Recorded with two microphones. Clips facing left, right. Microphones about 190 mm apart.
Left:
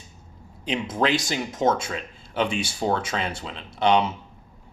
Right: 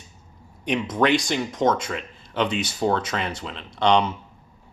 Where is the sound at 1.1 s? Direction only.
5° left (ahead or behind).